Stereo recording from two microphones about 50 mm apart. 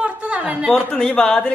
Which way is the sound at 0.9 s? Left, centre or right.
Left.